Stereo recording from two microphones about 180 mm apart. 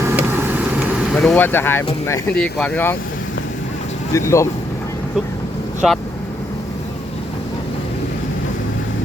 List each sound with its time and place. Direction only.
0.0 s vehicle: 10° right (ahead or behind)
1.1 s speech: 5° left (ahead or behind)
4.1 s speech: 15° left (ahead or behind)
5.8 s speech: centre (ahead or behind)